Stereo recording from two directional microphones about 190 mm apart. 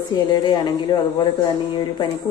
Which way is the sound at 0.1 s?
25° left (ahead or behind).